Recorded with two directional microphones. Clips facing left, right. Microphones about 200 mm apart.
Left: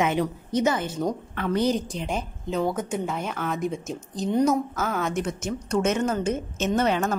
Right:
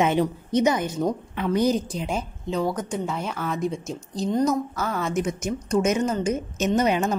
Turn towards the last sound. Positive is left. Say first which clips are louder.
# right 2 dB
turn(degrees=-10)  # may be behind; listen again after turning